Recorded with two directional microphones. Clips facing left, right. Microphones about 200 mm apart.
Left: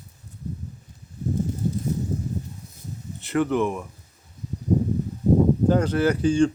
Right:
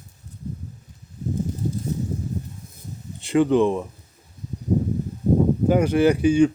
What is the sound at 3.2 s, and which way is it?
Speech, 15° right (ahead or behind).